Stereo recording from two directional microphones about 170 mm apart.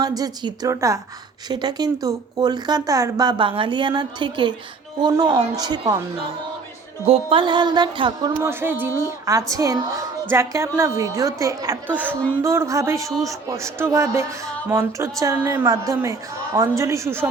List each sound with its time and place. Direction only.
0.0 s speech: 20° right (ahead or behind)
7.0 s speech: 35° right (ahead or behind)
8.4 s speech: 15° right (ahead or behind)